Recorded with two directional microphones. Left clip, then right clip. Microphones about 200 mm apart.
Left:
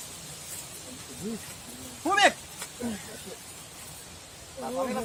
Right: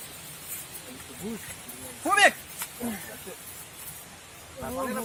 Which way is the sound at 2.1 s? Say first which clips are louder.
Right 2 dB; 30° right (ahead or behind).